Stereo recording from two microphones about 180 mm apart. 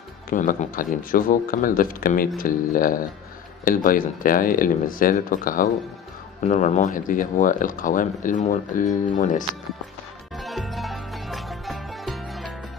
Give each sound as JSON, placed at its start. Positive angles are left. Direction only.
{"t": 0.3, "sound": "speech", "side_deg": 45}
{"t": 10.3, "sound": "music", "side_deg": 0}